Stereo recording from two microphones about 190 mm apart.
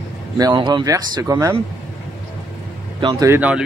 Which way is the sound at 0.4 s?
20° right (ahead or behind).